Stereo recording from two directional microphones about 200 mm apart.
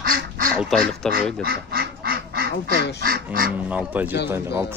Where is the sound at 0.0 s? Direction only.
45° right (ahead or behind).